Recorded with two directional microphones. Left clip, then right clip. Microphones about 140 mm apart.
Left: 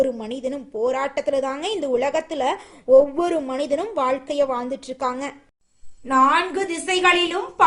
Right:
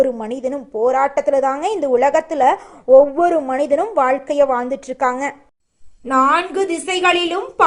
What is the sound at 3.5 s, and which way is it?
A woman's voice, 10° left (ahead or behind).